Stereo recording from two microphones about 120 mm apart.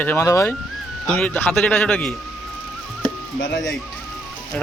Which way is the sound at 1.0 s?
10° left (ahead or behind).